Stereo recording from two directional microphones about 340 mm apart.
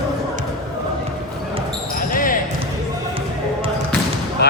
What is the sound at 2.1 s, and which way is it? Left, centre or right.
Basketball bounce, left.